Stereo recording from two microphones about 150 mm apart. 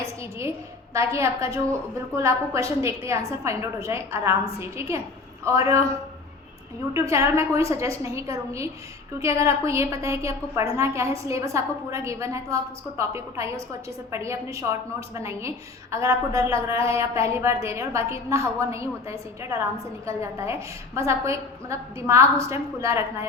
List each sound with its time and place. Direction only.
0.0 s a sound: 20° right (ahead or behind)
0.9 s a woman's voice: 20° right (ahead or behind)
6.9 s a woman's voice: 20° right (ahead or behind)